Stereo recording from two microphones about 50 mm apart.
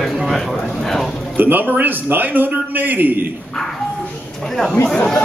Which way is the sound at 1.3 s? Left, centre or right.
Right.